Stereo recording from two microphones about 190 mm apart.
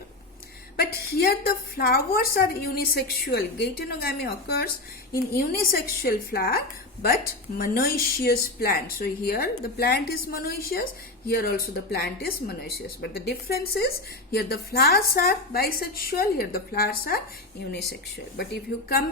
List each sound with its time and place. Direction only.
0.8 s a woman's voice: 55° left (ahead or behind)